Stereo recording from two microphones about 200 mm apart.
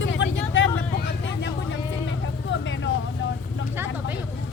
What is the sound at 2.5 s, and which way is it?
Vehicle, 65° left (ahead or behind).